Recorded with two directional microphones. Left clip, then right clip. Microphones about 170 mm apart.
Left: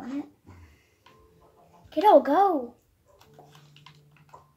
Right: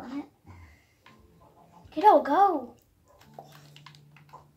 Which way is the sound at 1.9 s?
35° left (ahead or behind).